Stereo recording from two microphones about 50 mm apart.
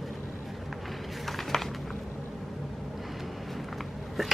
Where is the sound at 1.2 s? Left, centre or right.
Centre.